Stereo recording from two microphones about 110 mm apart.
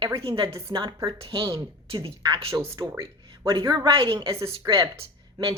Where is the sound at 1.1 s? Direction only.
50° right (ahead or behind).